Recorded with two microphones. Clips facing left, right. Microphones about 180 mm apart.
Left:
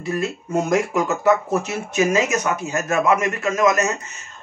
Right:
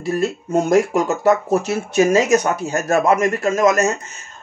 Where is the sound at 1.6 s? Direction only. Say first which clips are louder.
Right 4 dB; 35° right (ahead or behind).